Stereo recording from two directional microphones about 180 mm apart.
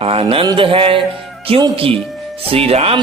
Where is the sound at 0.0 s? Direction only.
30° right (ahead or behind).